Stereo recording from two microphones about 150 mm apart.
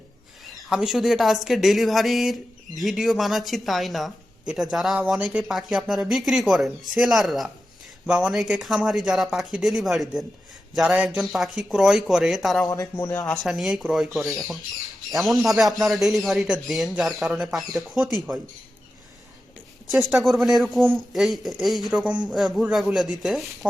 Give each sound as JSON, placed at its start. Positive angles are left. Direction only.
{"t": 0.4, "sound": "a woman's voice", "side_deg": -5}
{"t": 12.6, "sound": "speech", "side_deg": 25}
{"t": 13.0, "sound": "a woman's voice", "side_deg": 15}
{"t": 19.9, "sound": "a woman's voice", "side_deg": 0}